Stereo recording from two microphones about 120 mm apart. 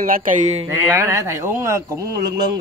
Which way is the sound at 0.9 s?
20° right (ahead or behind).